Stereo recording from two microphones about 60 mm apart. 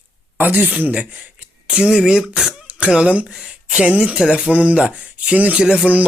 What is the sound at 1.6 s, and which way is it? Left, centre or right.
Speech, centre.